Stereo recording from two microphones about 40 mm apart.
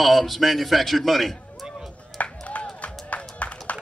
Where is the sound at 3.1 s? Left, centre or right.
Left.